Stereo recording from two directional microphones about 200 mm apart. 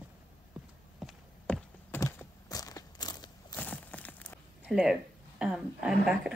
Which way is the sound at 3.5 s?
10° left (ahead or behind).